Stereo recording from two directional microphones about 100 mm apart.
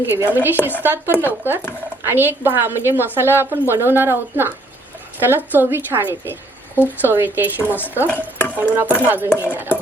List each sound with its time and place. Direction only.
0.1 s a woman's voice: 20° right (ahead or behind)
8.0 s stir: 20° left (ahead or behind)
8.5 s a woman's voice: 25° right (ahead or behind)